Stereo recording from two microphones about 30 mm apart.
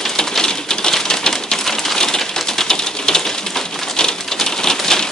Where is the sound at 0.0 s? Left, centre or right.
Centre.